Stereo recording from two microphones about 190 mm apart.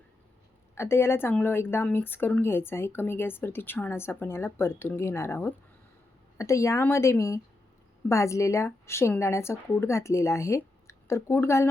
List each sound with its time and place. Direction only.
0.8 s a woman's voice: 15° left (ahead or behind)